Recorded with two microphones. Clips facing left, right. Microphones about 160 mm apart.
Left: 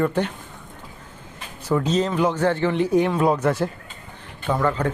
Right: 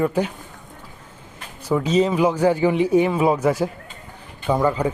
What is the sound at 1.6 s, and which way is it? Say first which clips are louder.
Speech: right 2 dB; 10° right (ahead or behind).